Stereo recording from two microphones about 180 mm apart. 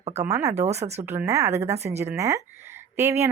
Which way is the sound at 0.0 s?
40° right (ahead or behind).